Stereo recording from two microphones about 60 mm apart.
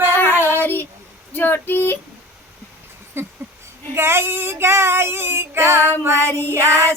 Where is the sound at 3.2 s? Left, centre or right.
Right.